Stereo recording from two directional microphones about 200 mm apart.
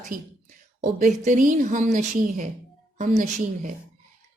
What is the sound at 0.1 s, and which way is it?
A woman's voice, 45° right (ahead or behind).